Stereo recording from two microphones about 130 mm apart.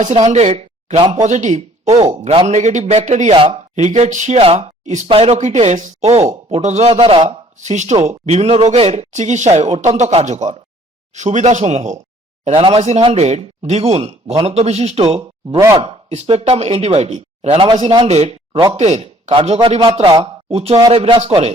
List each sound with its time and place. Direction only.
0.0 s speech: 65° right (ahead or behind)
2.5 s speech: 65° right (ahead or behind)
3.3 s speech: 40° right (ahead or behind)
3.8 s speech: 60° right (ahead or behind)
4.4 s speech: 50° right (ahead or behind)
5.0 s speech: 50° right (ahead or behind)
12.5 s speech: 50° right (ahead or behind)
18.0 s speech: 55° right (ahead or behind); by 20.2 s 30° right (ahead or behind)
20.5 s speech: 50° right (ahead or behind)